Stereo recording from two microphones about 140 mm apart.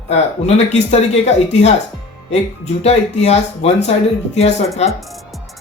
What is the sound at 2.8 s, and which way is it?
Speech, 50° left (ahead or behind).